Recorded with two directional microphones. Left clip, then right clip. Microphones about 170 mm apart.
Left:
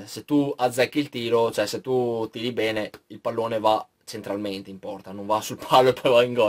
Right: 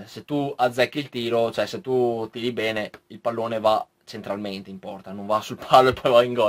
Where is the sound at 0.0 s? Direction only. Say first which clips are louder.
Left 3 dB; 10° left (ahead or behind).